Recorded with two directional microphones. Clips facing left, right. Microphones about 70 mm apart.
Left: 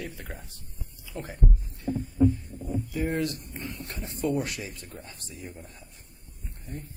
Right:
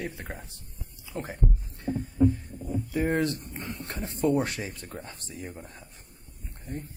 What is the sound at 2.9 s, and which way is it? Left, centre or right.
Speech, right.